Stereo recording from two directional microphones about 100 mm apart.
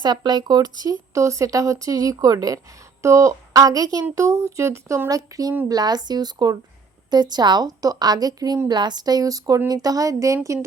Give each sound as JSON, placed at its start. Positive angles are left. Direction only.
{"t": 0.0, "sound": "speech", "side_deg": -45}